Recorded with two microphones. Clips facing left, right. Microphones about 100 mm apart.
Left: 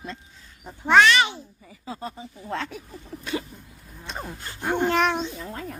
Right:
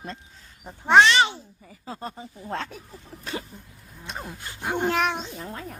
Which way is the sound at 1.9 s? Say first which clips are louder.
Left 1 dB; 40° right (ahead or behind).